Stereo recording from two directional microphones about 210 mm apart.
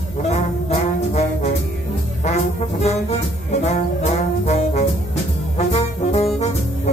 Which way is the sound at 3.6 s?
30° left (ahead or behind).